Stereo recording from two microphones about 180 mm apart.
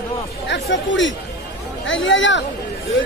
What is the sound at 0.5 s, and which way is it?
Speech, 90° left.